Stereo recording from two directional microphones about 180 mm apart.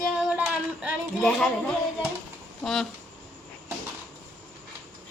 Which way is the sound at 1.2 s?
Centre (ahead or behind).